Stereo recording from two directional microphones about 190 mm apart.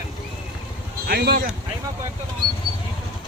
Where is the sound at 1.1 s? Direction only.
50° right (ahead or behind).